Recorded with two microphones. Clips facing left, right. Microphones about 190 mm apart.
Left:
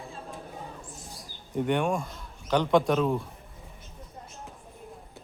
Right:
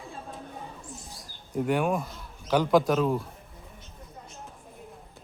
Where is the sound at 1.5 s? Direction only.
Centre (ahead or behind).